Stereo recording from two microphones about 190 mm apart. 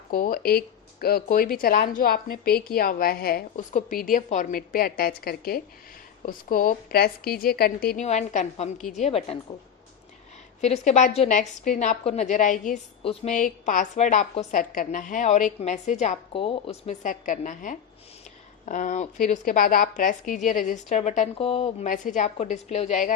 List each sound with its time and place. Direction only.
0.1 s a woman's voice: 50° left (ahead or behind)
8.0 s a woman's voice: 40° left (ahead or behind)
10.6 s a woman's voice: 35° left (ahead or behind)
21.8 s a woman's voice: 40° left (ahead or behind)